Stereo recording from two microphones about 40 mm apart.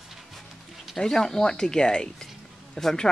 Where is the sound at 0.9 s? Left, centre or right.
Centre.